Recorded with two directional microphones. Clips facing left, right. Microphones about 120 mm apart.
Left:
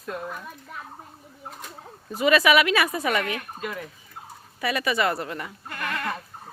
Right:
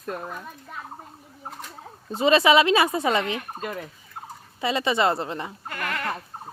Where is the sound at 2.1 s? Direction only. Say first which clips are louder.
Right 2 dB; 25° right (ahead or behind).